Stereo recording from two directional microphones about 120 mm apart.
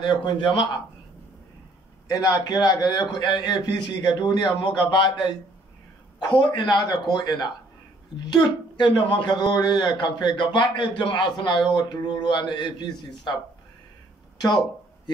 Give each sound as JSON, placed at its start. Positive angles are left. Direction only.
{"t": 0.0, "sound": "a man's voice", "side_deg": 40}
{"t": 2.0, "sound": "a man's voice", "side_deg": 30}